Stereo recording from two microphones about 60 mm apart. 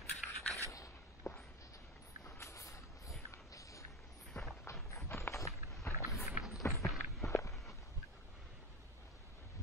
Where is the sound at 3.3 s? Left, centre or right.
Left.